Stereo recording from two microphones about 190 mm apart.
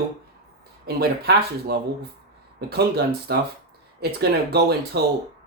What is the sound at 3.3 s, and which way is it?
Speech, 60° right (ahead or behind).